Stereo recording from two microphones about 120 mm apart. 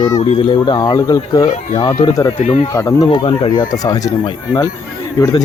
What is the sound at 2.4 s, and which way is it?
Speech, 60° left (ahead or behind).